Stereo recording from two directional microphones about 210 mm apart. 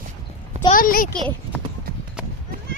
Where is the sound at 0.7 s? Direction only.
40° left (ahead or behind).